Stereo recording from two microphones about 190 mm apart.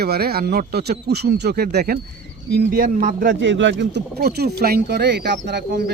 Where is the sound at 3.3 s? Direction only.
75° right (ahead or behind).